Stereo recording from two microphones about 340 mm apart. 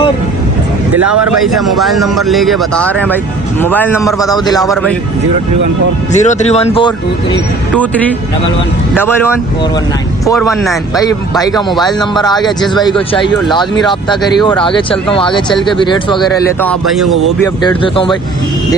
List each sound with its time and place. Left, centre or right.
1.5 s speech: centre
6.1 s speech: centre
7.8 s speech: centre
11.3 s speech: centre
17.4 s speech: centre